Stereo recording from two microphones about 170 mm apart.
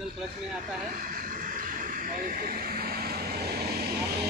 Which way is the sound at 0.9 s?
55° right (ahead or behind).